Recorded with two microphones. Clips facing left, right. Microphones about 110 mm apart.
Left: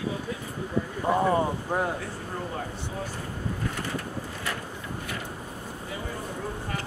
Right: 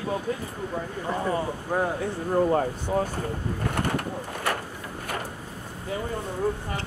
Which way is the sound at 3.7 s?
60° right (ahead or behind).